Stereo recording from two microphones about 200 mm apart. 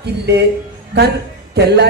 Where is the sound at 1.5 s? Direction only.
55° right (ahead or behind).